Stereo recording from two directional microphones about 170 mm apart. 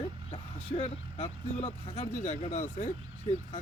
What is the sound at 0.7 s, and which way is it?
Speech, 40° left (ahead or behind).